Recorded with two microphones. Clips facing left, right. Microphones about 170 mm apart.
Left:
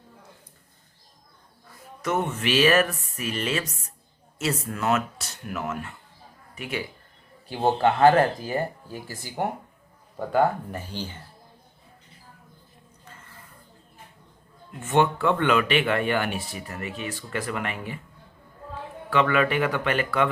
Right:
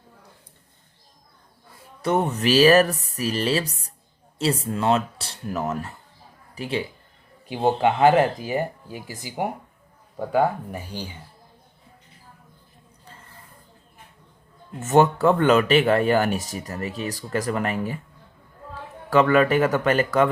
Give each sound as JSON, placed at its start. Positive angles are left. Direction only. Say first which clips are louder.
{"t": 2.0, "sound": "speech", "louder": "right 4 dB", "side_deg": -35}
{"t": 7.4, "sound": "speech", "louder": "right 1 dB", "side_deg": -15}
{"t": 14.8, "sound": "speech", "louder": "right 4 dB", "side_deg": -40}
{"t": 19.1, "sound": "speech", "louder": "right 5 dB", "side_deg": -40}